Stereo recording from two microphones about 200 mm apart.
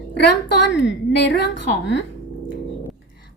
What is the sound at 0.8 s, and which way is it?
Speech, 60° left (ahead or behind).